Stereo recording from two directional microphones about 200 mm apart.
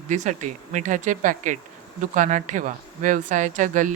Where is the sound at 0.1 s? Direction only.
35° right (ahead or behind).